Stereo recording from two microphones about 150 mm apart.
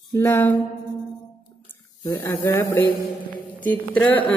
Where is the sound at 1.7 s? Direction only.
15° left (ahead or behind).